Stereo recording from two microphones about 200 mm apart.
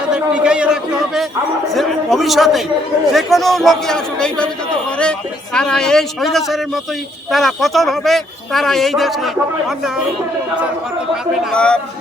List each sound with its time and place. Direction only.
0.1 s speech: 5° right (ahead or behind)
5.5 s speech: 5° left (ahead or behind)
11.5 s speech: 5° left (ahead or behind)